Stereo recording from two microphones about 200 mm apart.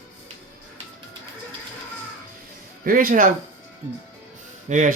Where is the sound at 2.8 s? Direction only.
45° right (ahead or behind).